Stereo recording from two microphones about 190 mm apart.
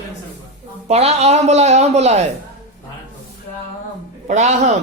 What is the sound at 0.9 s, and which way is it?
Speech, 35° right (ahead or behind).